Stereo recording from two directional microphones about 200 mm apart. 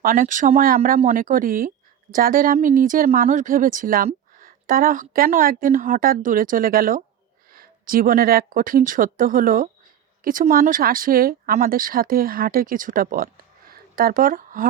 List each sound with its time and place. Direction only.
0.0 s speech: 45° right (ahead or behind)